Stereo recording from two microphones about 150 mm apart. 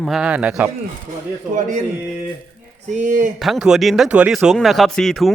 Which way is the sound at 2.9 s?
55° right (ahead or behind).